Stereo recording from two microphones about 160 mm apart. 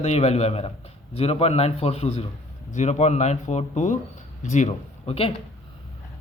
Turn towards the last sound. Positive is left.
turn(degrees=40)  # may be behind; listen again after turning